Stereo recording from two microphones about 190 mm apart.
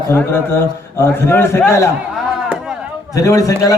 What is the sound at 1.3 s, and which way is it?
Speech, 10° left (ahead or behind).